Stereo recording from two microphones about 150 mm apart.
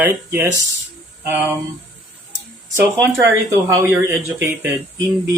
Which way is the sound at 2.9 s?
20° right (ahead or behind).